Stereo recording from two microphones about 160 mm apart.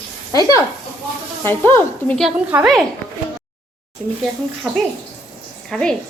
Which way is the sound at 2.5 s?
10° right (ahead or behind).